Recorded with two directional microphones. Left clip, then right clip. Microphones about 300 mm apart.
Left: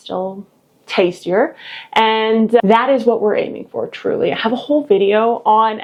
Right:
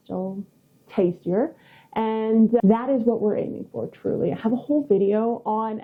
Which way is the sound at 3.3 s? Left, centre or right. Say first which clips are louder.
Left 8 dB; centre.